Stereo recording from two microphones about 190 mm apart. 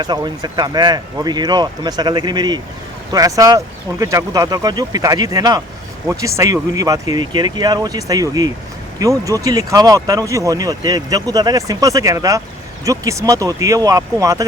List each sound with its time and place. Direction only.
0.0 s speech: 20° right (ahead or behind)